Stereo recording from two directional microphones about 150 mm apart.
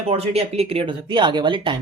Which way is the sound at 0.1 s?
40° right (ahead or behind).